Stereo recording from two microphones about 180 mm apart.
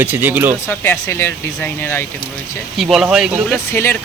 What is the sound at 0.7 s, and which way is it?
Speech, 10° left (ahead or behind).